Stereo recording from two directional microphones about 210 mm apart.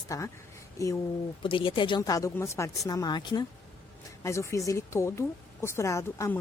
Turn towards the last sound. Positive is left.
turn(degrees=15)  # may be behind; listen again after turning